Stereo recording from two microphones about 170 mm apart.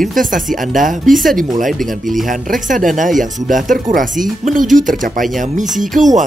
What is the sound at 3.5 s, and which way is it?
Speech, 50° right (ahead or behind).